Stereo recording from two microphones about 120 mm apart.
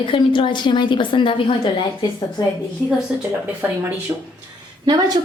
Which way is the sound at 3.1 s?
10° right (ahead or behind).